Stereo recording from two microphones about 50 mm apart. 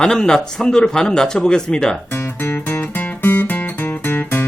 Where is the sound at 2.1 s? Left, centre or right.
Left.